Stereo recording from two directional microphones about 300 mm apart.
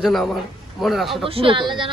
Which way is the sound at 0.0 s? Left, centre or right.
Centre.